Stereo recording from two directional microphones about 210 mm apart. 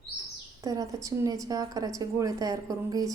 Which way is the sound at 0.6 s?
15° right (ahead or behind).